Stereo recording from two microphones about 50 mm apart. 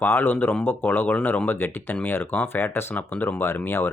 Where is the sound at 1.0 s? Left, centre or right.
Left.